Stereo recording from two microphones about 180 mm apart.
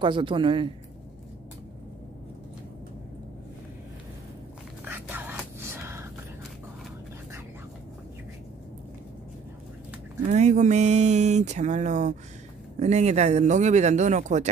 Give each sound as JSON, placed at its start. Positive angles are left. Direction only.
{"t": 0.0, "sound": "speech", "side_deg": -30}
{"t": 4.8, "sound": "whispering", "side_deg": -10}
{"t": 5.6, "sound": "a sound", "side_deg": -15}
{"t": 10.3, "sound": "speech", "side_deg": -40}